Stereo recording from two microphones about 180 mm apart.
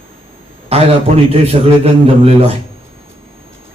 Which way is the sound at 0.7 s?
35° right (ahead or behind).